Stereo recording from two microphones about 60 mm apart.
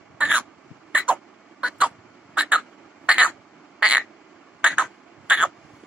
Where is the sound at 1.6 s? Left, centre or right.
Right.